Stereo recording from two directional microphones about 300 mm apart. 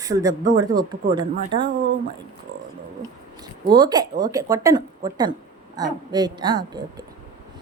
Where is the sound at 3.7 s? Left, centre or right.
Centre.